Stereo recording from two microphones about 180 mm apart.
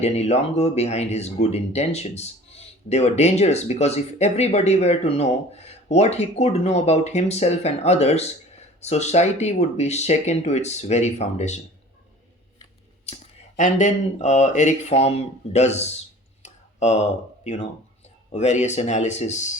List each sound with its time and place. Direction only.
0.0 s speech: 35° left (ahead or behind)
13.6 s speech: 40° left (ahead or behind)
16.4 s a sound: 40° left (ahead or behind)
18.3 s speech: 40° left (ahead or behind)